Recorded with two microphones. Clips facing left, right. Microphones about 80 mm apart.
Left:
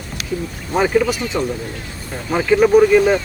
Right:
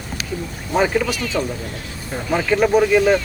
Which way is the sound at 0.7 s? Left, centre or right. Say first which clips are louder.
Left 2 dB; centre.